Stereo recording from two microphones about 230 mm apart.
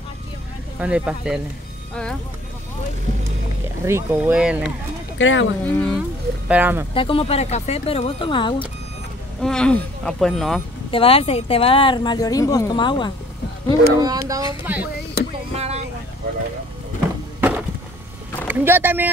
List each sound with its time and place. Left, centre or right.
0.7 s speech: centre
3.8 s speech: centre
5.2 s speech: left
5.7 s speech: centre
6.5 s speech: centre
6.9 s speech: left
9.4 s speech: centre
10.9 s speech: left
14.0 s speech: centre
15.5 s music: right
17.4 s a sound: centre
18.5 s speech: centre